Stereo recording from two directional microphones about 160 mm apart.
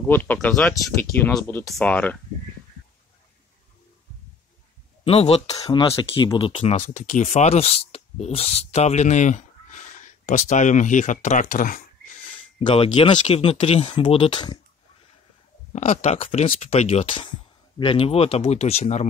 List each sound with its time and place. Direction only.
0.0 s speech: 10° left (ahead or behind)
5.0 s speech: 40° left (ahead or behind)
5.6 s speech: 25° left (ahead or behind)
5.9 s speech: 35° left (ahead or behind); by 12.3 s 55° left (ahead or behind)
12.5 s speech: 35° left (ahead or behind)
15.7 s speech: 40° left (ahead or behind)